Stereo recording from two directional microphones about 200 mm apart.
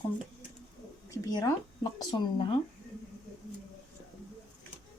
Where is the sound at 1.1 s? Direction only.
20° left (ahead or behind).